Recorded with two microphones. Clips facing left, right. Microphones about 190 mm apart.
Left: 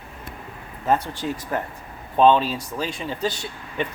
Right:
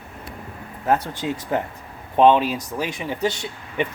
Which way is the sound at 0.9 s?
15° right (ahead or behind).